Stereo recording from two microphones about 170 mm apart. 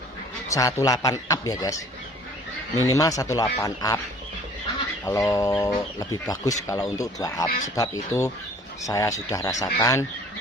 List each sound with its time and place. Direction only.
0.4 s speech: 20° left (ahead or behind)
2.7 s speech: 20° left (ahead or behind)
5.0 s speech: 20° left (ahead or behind)